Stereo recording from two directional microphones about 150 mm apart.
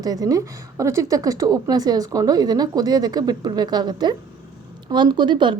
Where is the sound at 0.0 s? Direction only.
25° right (ahead or behind).